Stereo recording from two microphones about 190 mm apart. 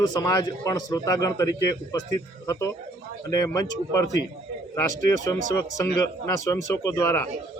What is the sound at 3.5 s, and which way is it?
A man's voice, 15° left (ahead or behind).